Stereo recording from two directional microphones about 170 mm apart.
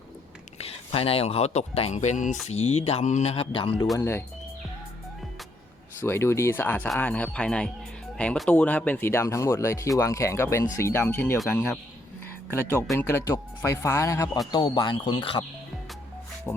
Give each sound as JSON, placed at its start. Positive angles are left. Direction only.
{"t": 0.6, "sound": "speech", "side_deg": 35}
{"t": 3.9, "sound": "speech", "side_deg": 15}
{"t": 6.0, "sound": "speech", "side_deg": 15}
{"t": 12.5, "sound": "speech", "side_deg": 15}
{"t": 16.5, "sound": "speech", "side_deg": 15}